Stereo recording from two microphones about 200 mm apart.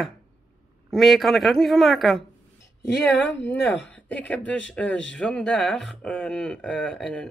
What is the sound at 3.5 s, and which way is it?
Speech, 60° left (ahead or behind).